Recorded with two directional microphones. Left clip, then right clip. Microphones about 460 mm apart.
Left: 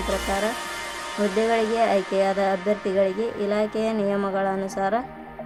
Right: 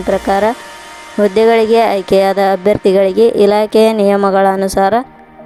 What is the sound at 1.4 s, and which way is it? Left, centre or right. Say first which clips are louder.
A woman's voice: right 12 dB; centre.